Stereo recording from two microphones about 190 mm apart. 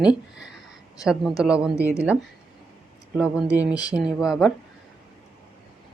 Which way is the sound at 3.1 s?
5° right (ahead or behind).